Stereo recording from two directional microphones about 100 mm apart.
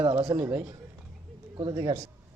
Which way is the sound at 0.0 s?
55° right (ahead or behind).